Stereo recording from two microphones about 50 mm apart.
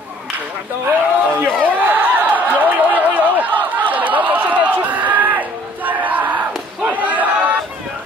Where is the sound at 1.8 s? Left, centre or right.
Right.